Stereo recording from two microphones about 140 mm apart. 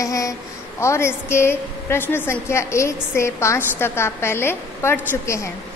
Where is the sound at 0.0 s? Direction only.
25° left (ahead or behind).